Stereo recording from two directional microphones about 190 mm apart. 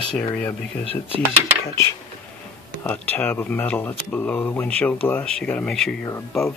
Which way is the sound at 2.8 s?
10° left (ahead or behind).